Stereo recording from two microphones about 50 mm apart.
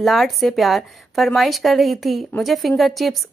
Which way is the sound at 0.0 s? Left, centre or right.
Centre.